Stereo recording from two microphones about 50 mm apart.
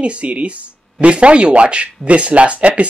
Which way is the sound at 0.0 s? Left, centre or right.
Right.